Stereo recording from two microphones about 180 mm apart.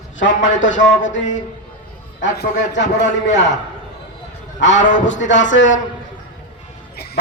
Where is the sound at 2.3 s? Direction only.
65° left (ahead or behind).